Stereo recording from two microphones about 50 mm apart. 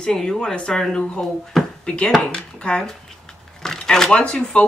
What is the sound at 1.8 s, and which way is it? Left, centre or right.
Speech, left.